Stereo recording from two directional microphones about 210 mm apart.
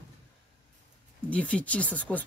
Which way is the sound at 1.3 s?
5° left (ahead or behind).